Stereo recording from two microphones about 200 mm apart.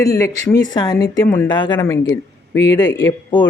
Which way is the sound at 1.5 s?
25° left (ahead or behind).